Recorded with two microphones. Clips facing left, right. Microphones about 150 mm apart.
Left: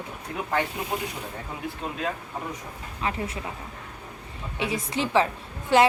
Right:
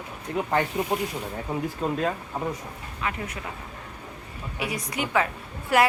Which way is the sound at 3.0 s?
30° left (ahead or behind).